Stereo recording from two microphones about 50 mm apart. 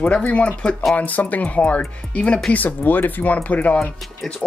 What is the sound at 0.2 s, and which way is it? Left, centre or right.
Speech, left.